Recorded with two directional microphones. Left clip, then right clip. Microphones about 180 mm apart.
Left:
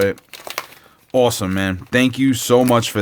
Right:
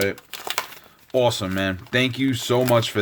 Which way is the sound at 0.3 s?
10° left (ahead or behind).